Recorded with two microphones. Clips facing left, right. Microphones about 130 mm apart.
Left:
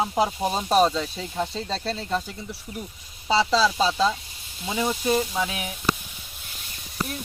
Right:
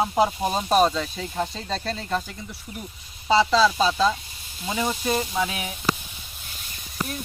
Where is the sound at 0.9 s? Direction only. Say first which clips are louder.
Even; 30° left (ahead or behind).